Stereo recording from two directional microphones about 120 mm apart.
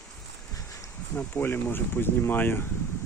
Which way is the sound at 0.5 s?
30° left (ahead or behind).